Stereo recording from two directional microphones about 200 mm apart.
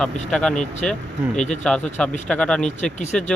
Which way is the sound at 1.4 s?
35° left (ahead or behind).